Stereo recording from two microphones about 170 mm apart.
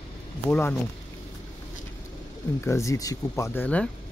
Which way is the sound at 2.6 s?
15° left (ahead or behind).